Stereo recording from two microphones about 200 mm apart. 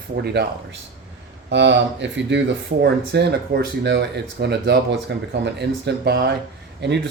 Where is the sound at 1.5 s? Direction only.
65° right (ahead or behind).